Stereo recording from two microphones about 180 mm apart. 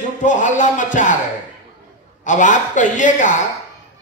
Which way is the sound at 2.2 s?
45° left (ahead or behind).